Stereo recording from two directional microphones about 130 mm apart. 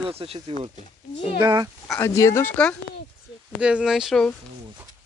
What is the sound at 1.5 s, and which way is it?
Speech, 30° right (ahead or behind).